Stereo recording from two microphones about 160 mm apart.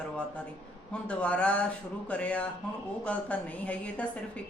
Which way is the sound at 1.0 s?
10° left (ahead or behind).